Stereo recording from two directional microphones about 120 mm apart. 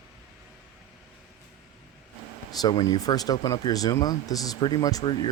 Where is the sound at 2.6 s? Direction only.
30° left (ahead or behind).